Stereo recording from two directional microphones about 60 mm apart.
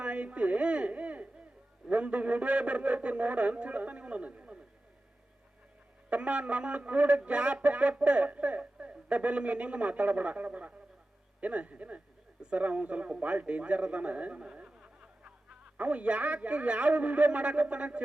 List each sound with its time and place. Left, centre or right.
0.0 s speech: right
6.1 s speech: right